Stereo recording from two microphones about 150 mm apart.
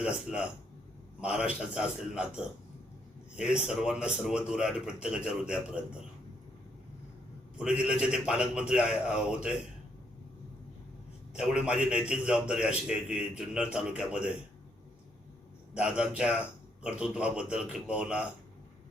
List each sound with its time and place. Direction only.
0.0 s a man's voice: 5° right (ahead or behind)
7.6 s a man's voice: 5° right (ahead or behind)
11.3 s a man's voice: 5° right (ahead or behind)
15.7 s a man's voice: 5° right (ahead or behind)